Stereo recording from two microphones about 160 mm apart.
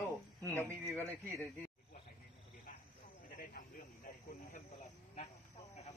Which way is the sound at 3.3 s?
55° left (ahead or behind).